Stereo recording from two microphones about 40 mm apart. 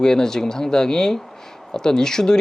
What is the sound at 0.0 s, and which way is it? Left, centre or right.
Speech, centre.